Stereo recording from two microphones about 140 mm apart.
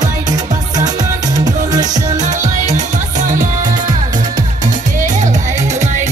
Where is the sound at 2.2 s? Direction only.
60° right (ahead or behind).